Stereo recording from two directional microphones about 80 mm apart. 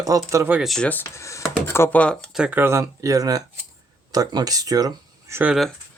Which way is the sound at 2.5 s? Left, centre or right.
Right.